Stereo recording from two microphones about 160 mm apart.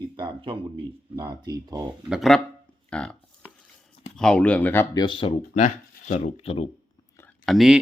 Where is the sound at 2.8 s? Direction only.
5° left (ahead or behind).